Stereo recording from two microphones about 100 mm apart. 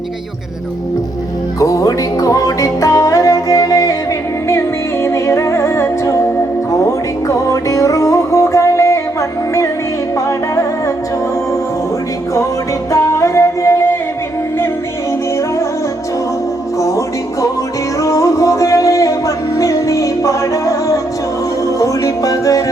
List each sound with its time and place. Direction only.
1.5 s music: 35° left (ahead or behind)
5.0 s music: 30° left (ahead or behind)
10.2 s music: 35° left (ahead or behind)
12.9 s music: 35° left (ahead or behind)
18.0 s music: 35° left (ahead or behind)